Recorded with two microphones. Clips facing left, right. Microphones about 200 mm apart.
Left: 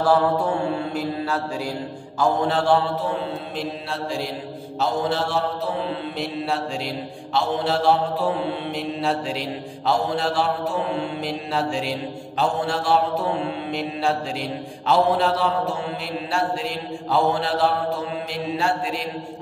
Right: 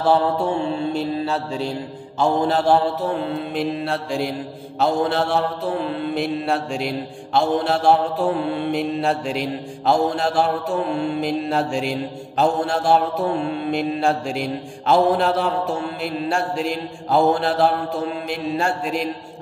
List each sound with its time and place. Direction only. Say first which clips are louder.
0.0 s mantra: right 1 dB; 25° right (ahead or behind)
2.4 s mantra: right 3 dB; 40° right (ahead or behind)
3.5 s mantra: right 6 dB; 55° right (ahead or behind)